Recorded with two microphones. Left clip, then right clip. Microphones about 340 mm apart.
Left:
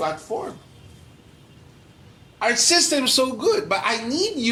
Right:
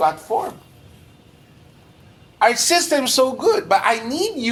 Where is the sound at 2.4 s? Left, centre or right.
Right.